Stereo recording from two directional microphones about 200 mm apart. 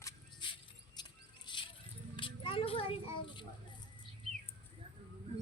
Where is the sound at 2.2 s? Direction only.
25° left (ahead or behind).